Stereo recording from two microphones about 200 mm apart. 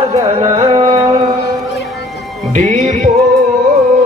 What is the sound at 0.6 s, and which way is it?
Music, 30° right (ahead or behind).